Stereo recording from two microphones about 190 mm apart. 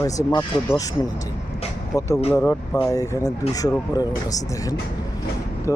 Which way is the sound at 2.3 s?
10° left (ahead or behind).